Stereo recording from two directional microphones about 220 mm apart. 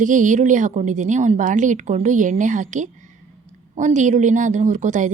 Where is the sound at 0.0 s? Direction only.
35° right (ahead or behind).